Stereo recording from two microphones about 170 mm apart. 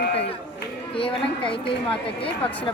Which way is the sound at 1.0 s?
30° left (ahead or behind).